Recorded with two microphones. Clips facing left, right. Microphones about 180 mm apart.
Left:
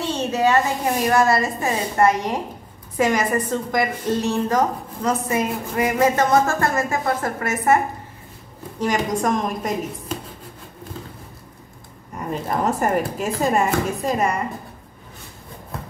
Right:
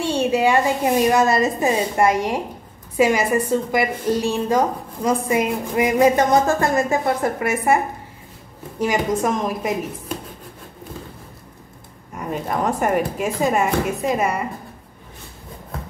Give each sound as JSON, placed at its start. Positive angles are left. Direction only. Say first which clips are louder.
{"t": 0.0, "sound": "a sound", "louder": "right 2 dB", "side_deg": -10}
{"t": 1.0, "sound": "a woman's voice", "louder": "left 1 dB", "side_deg": -20}
{"t": 12.3, "sound": "speech", "louder": "even", "side_deg": 0}